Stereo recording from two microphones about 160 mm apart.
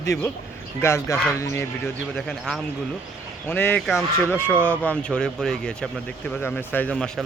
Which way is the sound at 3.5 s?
15° left (ahead or behind).